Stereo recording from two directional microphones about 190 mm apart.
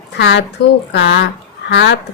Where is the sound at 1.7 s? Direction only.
70° left (ahead or behind).